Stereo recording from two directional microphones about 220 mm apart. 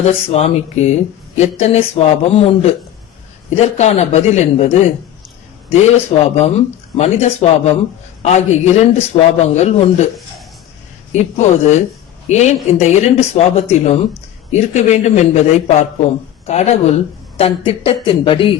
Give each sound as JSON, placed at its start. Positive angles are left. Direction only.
{"t": 0.0, "sound": "a man's voice", "side_deg": 30}
{"t": 3.8, "sound": "a man's voice", "side_deg": 30}
{"t": 6.1, "sound": "a man's voice", "side_deg": 30}
{"t": 11.1, "sound": "a man's voice", "side_deg": 35}